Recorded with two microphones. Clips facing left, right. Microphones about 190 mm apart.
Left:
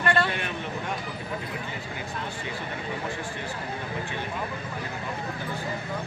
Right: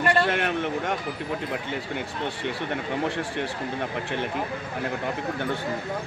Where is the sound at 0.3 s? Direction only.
75° right (ahead or behind).